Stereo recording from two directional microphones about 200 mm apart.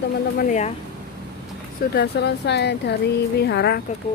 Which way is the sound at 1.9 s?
55° left (ahead or behind).